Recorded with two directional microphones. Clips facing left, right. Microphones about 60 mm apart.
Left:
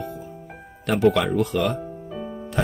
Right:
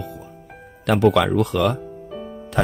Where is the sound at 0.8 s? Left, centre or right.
Right.